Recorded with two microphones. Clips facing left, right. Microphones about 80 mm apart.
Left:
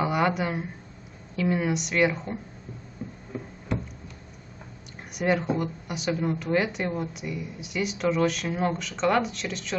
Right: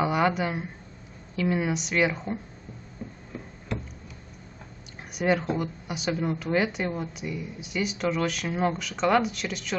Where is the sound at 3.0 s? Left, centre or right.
Centre.